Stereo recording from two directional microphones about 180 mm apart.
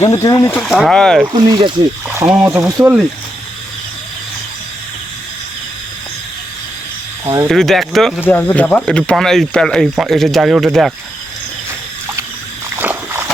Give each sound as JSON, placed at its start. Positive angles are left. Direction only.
{"t": 0.0, "sound": "speech", "side_deg": 15}
{"t": 0.6, "sound": "speech", "side_deg": 0}
{"t": 1.5, "sound": "speech", "side_deg": -25}
{"t": 2.4, "sound": "speech", "side_deg": -10}
{"t": 7.4, "sound": "speech", "side_deg": 0}
{"t": 8.2, "sound": "speech", "side_deg": 10}
{"t": 12.7, "sound": "walk", "side_deg": -10}